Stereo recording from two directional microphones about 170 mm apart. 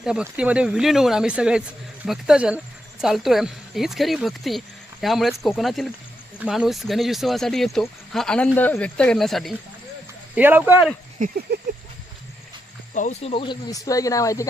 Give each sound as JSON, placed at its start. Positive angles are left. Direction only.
{"t": 0.0, "sound": "speech", "side_deg": -5}
{"t": 10.3, "sound": "speech", "side_deg": -10}
{"t": 11.2, "sound": "a sound", "side_deg": -60}
{"t": 12.9, "sound": "speech", "side_deg": 45}
{"t": 13.3, "sound": "speech", "side_deg": 30}